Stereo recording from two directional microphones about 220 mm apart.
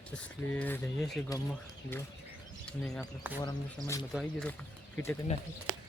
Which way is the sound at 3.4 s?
15° left (ahead or behind).